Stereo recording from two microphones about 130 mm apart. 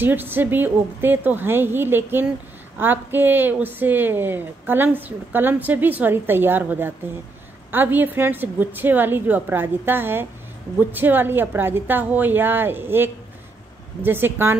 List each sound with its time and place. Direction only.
0.0 s a woman's voice: 15° right (ahead or behind)